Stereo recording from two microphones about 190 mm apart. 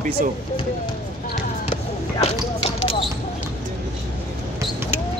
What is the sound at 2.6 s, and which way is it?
Basketball bounce, 30° left (ahead or behind).